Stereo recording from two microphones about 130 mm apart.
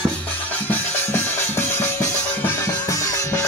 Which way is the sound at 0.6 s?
15° left (ahead or behind).